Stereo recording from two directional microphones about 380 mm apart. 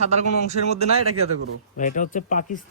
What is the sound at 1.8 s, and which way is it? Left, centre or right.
Speech, centre.